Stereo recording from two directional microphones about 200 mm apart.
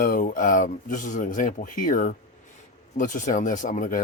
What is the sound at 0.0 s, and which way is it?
Speech, 45° left (ahead or behind).